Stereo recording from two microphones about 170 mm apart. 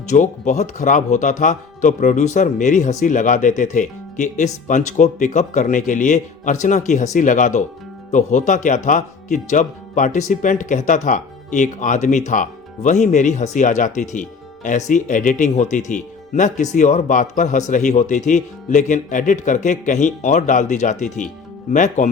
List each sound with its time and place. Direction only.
0.1 s speech: 45° left (ahead or behind)